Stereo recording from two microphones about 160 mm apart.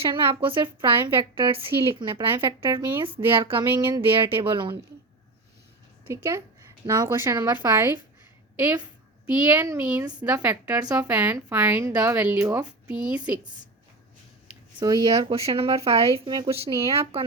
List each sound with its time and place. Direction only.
0.0 s a woman's voice: 35° right (ahead or behind)
3.7 s a woman's voice: 10° right (ahead or behind)
3.9 s speech: 30° right (ahead or behind)
6.1 s a woman's voice: 15° right (ahead or behind)
14.8 s speech: 25° right (ahead or behind)
15.1 s a woman's voice: 35° right (ahead or behind)